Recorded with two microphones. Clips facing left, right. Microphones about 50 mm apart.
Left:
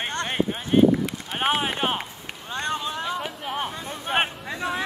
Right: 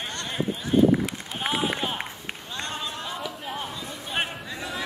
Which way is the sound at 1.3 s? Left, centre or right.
Left.